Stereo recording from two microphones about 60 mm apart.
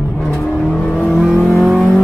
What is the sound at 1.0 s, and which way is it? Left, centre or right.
Vehicle, centre.